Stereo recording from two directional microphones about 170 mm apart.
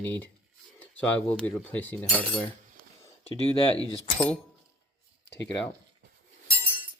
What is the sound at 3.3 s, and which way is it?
Speech, 35° left (ahead or behind).